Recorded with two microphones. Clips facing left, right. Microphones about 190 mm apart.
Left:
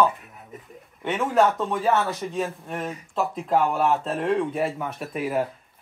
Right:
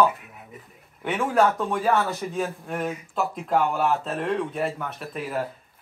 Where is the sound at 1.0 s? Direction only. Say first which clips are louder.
Left 1 dB; centre (ahead or behind).